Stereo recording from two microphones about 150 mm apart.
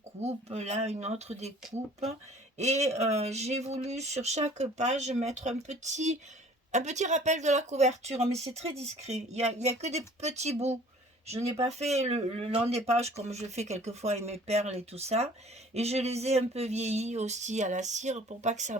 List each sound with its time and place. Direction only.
0.2 s speech: 45° right (ahead or behind)
2.6 s speech: 45° right (ahead or behind)